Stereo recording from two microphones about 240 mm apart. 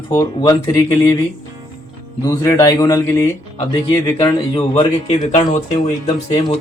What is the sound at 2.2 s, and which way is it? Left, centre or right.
Speech, centre.